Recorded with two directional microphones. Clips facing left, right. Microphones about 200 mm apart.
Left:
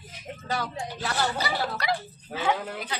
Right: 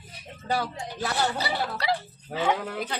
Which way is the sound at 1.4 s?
30° right (ahead or behind).